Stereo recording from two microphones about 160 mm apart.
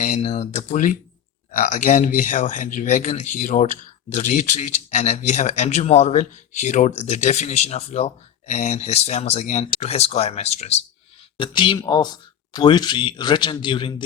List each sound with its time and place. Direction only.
0.0 s speech: 45° left (ahead or behind)
11.3 s speech: 30° left (ahead or behind)